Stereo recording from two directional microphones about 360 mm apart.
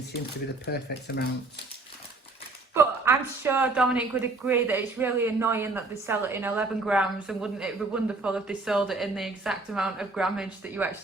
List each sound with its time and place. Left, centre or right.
0.6 s speech: left
2.7 s a woman's voice: centre